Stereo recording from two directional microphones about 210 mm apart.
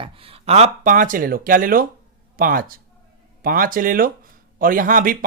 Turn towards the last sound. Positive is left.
turn(degrees=-40)  # may be behind; listen again after turning